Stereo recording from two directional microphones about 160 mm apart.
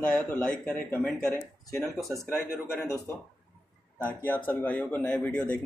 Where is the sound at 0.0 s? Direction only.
5° left (ahead or behind).